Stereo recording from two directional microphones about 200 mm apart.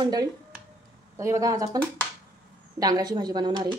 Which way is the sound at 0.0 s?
20° right (ahead or behind).